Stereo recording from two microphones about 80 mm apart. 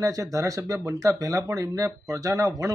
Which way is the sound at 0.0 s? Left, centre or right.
Right.